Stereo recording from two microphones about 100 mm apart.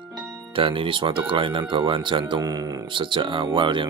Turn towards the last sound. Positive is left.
turn(degrees=-55)  # may be behind; listen again after turning